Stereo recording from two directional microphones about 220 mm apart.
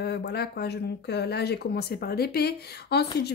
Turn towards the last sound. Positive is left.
turn(degrees=45)  # may be behind; listen again after turning